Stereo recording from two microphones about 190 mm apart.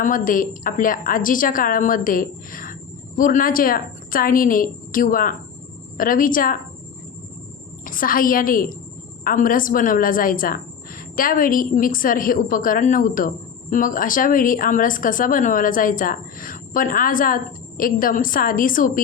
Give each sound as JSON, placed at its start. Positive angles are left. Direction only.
{"t": 0.0, "sound": "a woman's voice", "side_deg": 45}
{"t": 7.9, "sound": "a woman's voice", "side_deg": 45}